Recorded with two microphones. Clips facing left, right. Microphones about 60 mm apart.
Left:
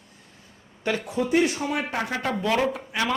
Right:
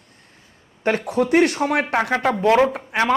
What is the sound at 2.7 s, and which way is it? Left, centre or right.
Speech, right.